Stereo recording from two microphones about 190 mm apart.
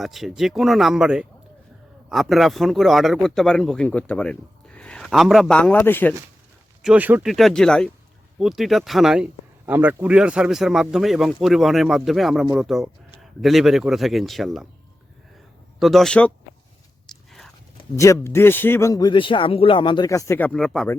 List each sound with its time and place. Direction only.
0.0 s a man's voice: centre (ahead or behind)
6.8 s a man's voice: 10° right (ahead or behind)
15.8 s a man's voice: centre (ahead or behind)
17.1 s a sound: centre (ahead or behind)
17.9 s a man's voice: 15° left (ahead or behind)